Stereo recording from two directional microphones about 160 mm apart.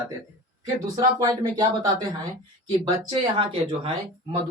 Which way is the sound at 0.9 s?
25° right (ahead or behind).